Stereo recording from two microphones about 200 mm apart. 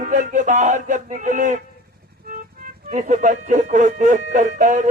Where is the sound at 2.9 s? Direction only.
40° right (ahead or behind).